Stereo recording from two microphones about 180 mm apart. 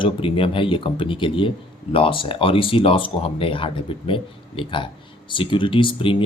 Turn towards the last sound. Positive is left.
turn(degrees=30)  # may be behind; listen again after turning